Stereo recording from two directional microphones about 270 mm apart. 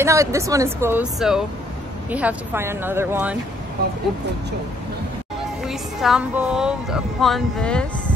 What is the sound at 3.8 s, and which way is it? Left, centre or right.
Speech, right.